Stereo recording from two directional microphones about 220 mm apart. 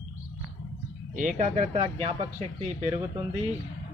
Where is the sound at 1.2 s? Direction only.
35° right (ahead or behind).